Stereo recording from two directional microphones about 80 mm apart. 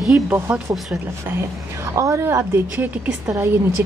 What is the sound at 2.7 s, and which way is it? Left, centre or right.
Speech, centre.